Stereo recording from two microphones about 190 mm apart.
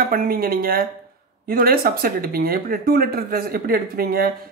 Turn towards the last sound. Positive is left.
turn(degrees=-50)  # may be behind; listen again after turning